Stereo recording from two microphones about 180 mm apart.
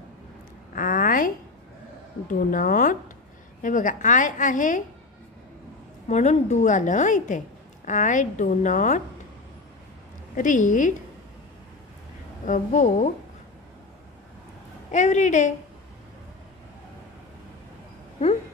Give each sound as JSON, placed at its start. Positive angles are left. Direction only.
{"t": 0.7, "sound": "a sound", "side_deg": 50}
{"t": 2.2, "sound": "a woman's voice", "side_deg": 45}
{"t": 6.0, "sound": "a woman's voice", "side_deg": 40}
{"t": 10.3, "sound": "a woman's voice", "side_deg": 45}
{"t": 12.4, "sound": "a woman's voice", "side_deg": 45}
{"t": 14.9, "sound": "a woman's voice", "side_deg": 40}